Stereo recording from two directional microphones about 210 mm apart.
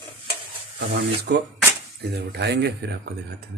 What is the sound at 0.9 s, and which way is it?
Speech, 50° right (ahead or behind).